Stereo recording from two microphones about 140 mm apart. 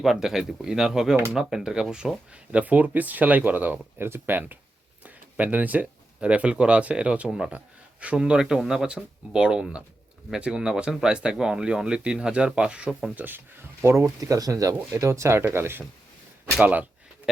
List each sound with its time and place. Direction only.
0.0 s speech: centre (ahead or behind)
13.1 s speech: 15° right (ahead or behind)